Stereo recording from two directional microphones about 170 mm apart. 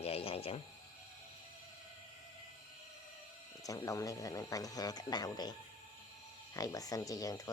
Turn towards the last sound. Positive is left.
turn(degrees=20)  # may be behind; listen again after turning